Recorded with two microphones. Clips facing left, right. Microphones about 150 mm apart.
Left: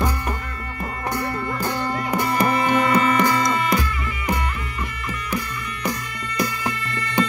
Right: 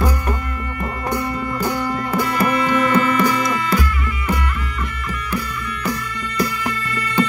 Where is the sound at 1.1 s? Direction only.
15° right (ahead or behind).